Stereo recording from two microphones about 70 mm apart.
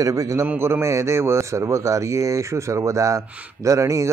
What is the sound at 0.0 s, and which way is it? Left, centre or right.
A man's voice, right.